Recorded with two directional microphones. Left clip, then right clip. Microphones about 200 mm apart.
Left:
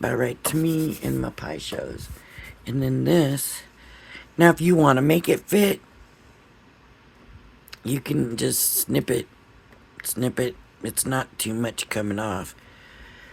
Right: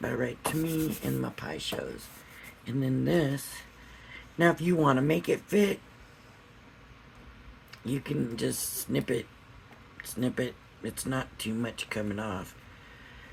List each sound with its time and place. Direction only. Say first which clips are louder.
0.0 s speech: left 7 dB; 50° left (ahead or behind)
7.7 s speech: left 7 dB; 50° left (ahead or behind)